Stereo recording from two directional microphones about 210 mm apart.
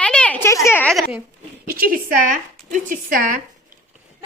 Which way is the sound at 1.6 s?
45° right (ahead or behind).